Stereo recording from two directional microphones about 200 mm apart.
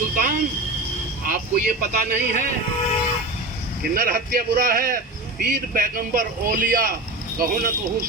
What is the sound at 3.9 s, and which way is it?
A man's voice, 45° right (ahead or behind).